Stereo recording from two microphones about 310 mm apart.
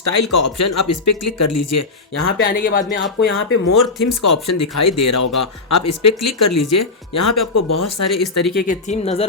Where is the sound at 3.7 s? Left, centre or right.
Left.